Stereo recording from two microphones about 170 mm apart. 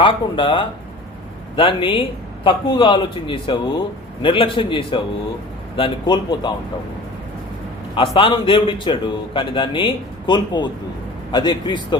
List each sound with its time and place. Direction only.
0.0 s a man's voice: 30° left (ahead or behind)
8.1 s a man's voice: 30° left (ahead or behind)